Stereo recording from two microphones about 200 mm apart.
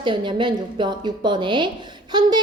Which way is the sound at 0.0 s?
25° right (ahead or behind).